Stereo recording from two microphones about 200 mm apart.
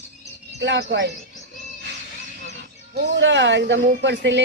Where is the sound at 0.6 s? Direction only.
60° right (ahead or behind).